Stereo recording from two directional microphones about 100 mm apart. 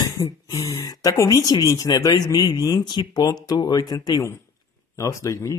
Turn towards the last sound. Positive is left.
turn(degrees=30)  # may be behind; listen again after turning